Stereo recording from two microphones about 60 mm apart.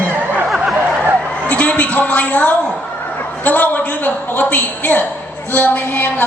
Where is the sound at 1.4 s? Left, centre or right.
Left.